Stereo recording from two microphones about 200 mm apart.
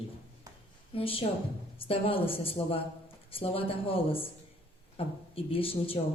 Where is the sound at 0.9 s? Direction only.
30° left (ahead or behind).